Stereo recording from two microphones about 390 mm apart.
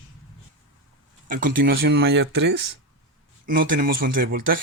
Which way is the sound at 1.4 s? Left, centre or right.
Right.